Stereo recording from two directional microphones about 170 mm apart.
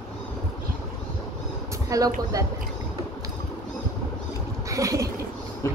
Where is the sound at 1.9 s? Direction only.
20° right (ahead or behind).